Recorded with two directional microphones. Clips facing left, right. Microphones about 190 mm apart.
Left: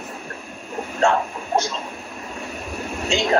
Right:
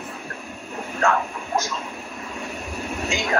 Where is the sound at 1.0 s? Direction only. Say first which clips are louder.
Left 3 dB; 30° left (ahead or behind).